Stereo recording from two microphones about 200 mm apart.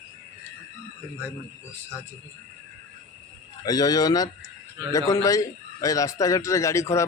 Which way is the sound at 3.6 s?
20° left (ahead or behind).